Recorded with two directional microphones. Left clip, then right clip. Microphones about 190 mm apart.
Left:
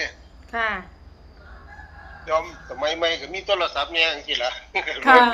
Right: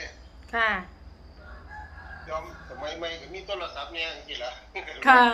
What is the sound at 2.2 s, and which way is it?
A man's voice, 65° left (ahead or behind).